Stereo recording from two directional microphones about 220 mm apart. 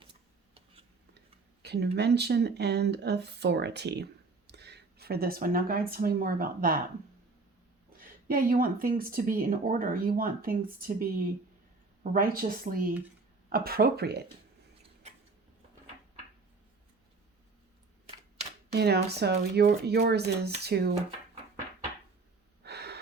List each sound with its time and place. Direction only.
0.0 s tick: 25° right (ahead or behind)
1.6 s a sound: 50° right (ahead or behind)
2.0 s speech: 50° right (ahead or behind)
7.9 s speech: 40° right (ahead or behind)
12.1 s speech: 40° right (ahead or behind)
18.7 s speech: 50° right (ahead or behind)
22.6 s gasp: 50° right (ahead or behind)